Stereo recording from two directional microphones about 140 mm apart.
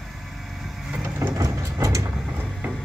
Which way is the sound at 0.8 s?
10° right (ahead or behind).